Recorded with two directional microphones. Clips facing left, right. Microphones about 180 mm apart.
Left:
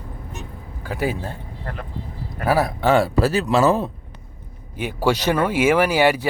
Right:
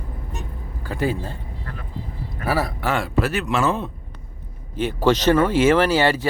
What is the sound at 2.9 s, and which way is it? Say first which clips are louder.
Speech: left 7 dB; 35° left (ahead or behind).